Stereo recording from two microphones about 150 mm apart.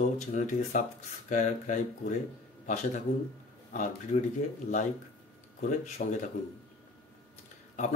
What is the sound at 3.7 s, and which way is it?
Speech, 55° left (ahead or behind).